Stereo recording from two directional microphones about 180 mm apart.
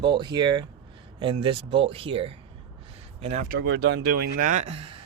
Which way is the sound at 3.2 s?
40° right (ahead or behind).